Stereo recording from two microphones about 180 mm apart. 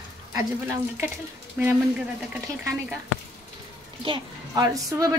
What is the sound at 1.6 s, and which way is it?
Speech, 10° right (ahead or behind).